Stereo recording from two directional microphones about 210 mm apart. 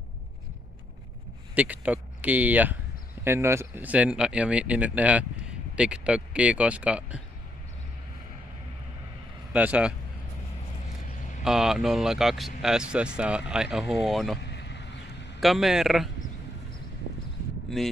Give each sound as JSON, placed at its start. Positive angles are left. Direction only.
{"t": 1.5, "sound": "speech", "side_deg": -5}
{"t": 9.5, "sound": "speech", "side_deg": -5}
{"t": 11.4, "sound": "speech", "side_deg": 0}
{"t": 14.4, "sound": "a sound", "side_deg": 55}
{"t": 15.4, "sound": "speech", "side_deg": 0}